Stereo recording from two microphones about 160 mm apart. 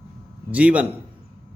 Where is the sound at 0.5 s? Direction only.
10° right (ahead or behind).